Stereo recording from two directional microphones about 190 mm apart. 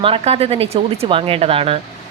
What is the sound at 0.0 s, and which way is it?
A woman's voice, 30° right (ahead or behind).